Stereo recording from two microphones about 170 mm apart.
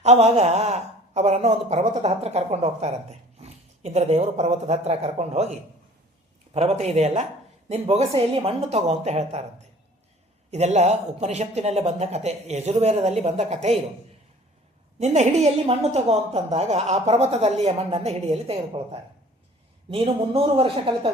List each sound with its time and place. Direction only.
0.0 s speech: 40° right (ahead or behind)
10.5 s speech: 40° right (ahead or behind)
14.9 s speech: 40° right (ahead or behind)